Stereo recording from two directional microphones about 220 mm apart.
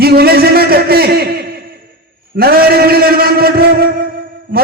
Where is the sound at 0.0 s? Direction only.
45° right (ahead or behind).